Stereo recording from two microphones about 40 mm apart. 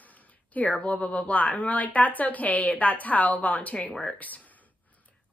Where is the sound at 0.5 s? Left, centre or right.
Left.